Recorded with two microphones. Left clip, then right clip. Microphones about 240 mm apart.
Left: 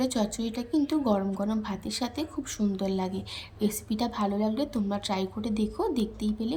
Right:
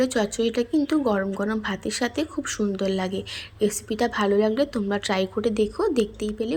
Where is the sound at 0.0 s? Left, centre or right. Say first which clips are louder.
Right 7 dB; centre.